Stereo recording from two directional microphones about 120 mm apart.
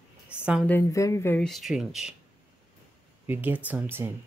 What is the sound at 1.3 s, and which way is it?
Speech, 5° left (ahead or behind).